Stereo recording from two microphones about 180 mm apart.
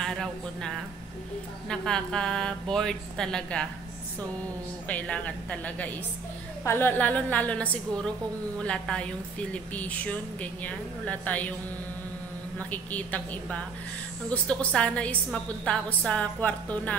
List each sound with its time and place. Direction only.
0.0 s a woman's voice: 5° left (ahead or behind)
4.8 s speech: 5° left (ahead or behind)
12.5 s speech: 10° left (ahead or behind)